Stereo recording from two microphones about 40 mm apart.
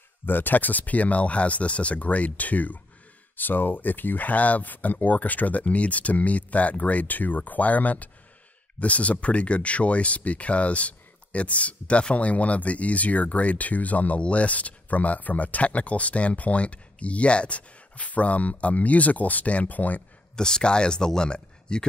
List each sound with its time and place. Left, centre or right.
0.3 s speech: left
3.3 s speech: left
20.3 s speech: centre